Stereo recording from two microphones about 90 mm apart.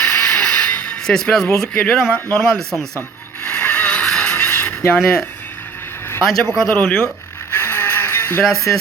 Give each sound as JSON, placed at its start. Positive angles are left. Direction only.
{"t": 0.0, "sound": "a sound", "side_deg": 10}
{"t": 1.7, "sound": "speech", "side_deg": 10}
{"t": 3.4, "sound": "a sound", "side_deg": 20}
{"t": 4.9, "sound": "speech", "side_deg": 5}
{"t": 6.2, "sound": "speech", "side_deg": 0}
{"t": 7.5, "sound": "music", "side_deg": 25}